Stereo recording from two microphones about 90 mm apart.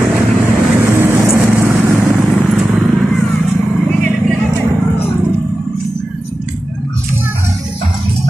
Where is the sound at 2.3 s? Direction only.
5° right (ahead or behind).